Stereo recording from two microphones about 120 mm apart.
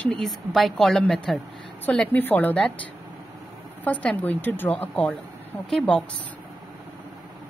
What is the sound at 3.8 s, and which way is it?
Speech, 15° left (ahead or behind).